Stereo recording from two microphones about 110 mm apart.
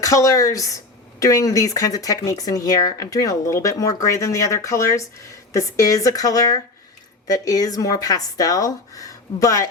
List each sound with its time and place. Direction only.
0.0 s speech: 30° left (ahead or behind)